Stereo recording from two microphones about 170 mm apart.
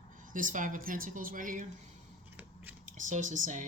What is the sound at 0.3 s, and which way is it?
Speech, 50° right (ahead or behind).